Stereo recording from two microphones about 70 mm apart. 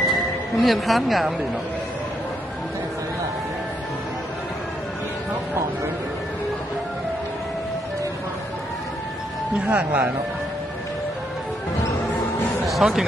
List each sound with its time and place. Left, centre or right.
0.0 s speech: centre
9.6 s speech: centre
12.6 s speech: centre